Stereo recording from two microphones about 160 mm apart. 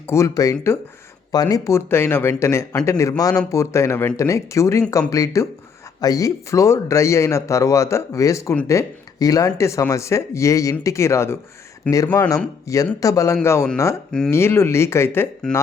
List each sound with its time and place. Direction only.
0.1 s speech: 20° left (ahead or behind)